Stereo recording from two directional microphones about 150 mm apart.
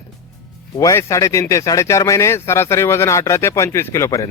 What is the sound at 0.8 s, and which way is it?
Speech, 20° left (ahead or behind).